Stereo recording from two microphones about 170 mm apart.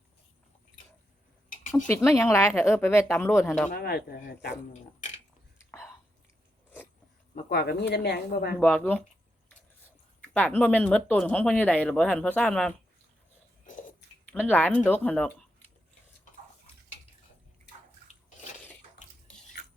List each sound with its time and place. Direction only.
1.7 s speech: 15° left (ahead or behind)
3.7 s speech: 65° left (ahead or behind)
7.5 s speech: 65° left (ahead or behind)
8.6 s speech: 10° left (ahead or behind)
10.2 s speech: 10° left (ahead or behind)
14.3 s speech: 10° left (ahead or behind)